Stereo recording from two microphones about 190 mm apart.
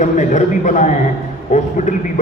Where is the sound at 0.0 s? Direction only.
40° left (ahead or behind).